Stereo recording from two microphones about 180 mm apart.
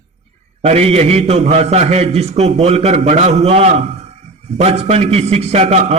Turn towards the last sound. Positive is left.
turn(degrees=-35)  # may be behind; listen again after turning